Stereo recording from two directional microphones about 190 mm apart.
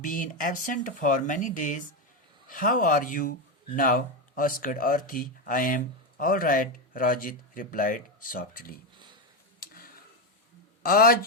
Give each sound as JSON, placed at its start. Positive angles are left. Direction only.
{"t": 0.0, "sound": "speech", "side_deg": 45}
{"t": 9.6, "sound": "tick-tock", "side_deg": 50}
{"t": 10.8, "sound": "speech", "side_deg": 50}